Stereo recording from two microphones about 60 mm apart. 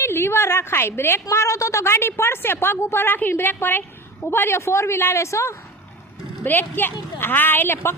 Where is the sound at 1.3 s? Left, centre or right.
Left.